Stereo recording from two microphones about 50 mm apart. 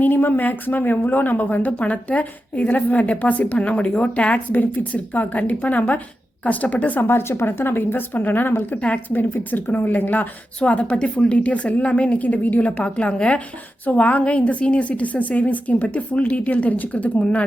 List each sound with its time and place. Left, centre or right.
0.0 s speech: left
7.0 s speech: left
10.6 s a woman's voice: left